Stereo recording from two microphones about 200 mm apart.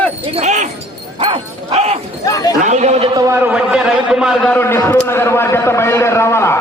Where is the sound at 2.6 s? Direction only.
35° right (ahead or behind).